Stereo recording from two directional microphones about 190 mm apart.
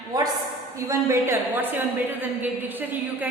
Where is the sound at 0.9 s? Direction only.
15° right (ahead or behind).